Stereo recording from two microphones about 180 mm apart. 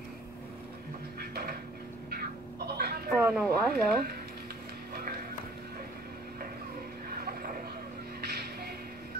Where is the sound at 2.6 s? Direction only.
60° right (ahead or behind).